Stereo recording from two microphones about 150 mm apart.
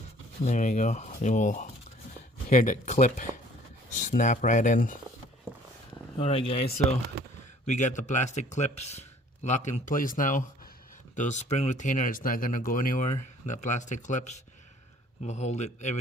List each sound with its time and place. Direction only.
0.4 s speech: 50° left (ahead or behind)
6.1 s speech: 40° left (ahead or behind)
7.7 s speech: 55° left (ahead or behind)